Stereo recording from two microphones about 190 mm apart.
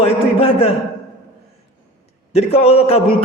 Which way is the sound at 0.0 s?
30° left (ahead or behind).